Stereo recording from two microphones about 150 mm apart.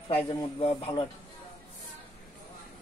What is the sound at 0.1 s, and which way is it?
Speech, 35° left (ahead or behind).